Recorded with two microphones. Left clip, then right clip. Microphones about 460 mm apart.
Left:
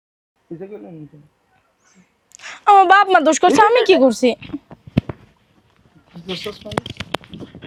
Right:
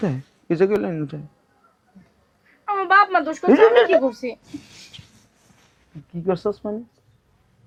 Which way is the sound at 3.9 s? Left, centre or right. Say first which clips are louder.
Left 6 dB; left.